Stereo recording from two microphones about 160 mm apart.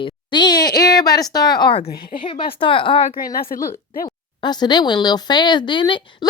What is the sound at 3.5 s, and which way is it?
Speech, 60° left (ahead or behind).